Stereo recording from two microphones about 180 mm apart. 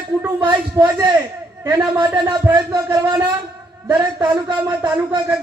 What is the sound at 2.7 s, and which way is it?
A man's voice, 15° right (ahead or behind).